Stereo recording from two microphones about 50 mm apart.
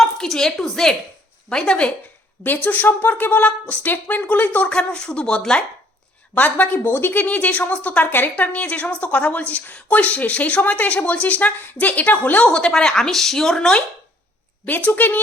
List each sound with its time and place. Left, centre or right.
0.0 s a woman's voice: centre
2.4 s a woman's voice: left
4.7 s a woman's voice: centre
6.3 s a woman's voice: left
8.5 s a woman's voice: left
12.5 s a woman's voice: left
14.7 s a woman's voice: left